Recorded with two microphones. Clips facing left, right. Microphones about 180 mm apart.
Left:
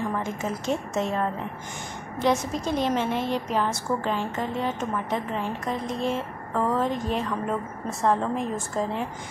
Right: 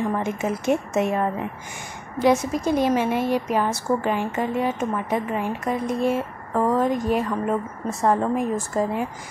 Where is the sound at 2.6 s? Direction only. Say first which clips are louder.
Right 5 dB; 50° right (ahead or behind).